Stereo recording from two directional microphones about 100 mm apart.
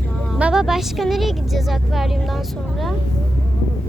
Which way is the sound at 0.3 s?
10° right (ahead or behind).